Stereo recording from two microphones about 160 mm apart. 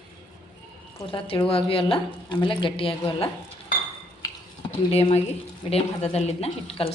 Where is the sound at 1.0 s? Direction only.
35° left (ahead or behind).